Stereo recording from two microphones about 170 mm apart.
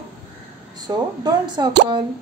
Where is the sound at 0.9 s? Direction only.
25° right (ahead or behind).